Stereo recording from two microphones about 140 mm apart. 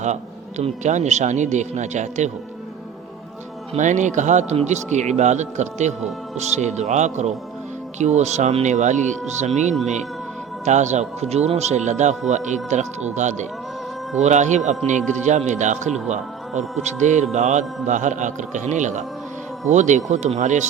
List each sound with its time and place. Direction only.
0.0 s speech: 55° right (ahead or behind)
3.8 s speech: 60° right (ahead or behind)